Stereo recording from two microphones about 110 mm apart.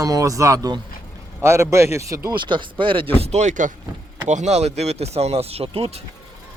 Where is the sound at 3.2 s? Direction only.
80° right.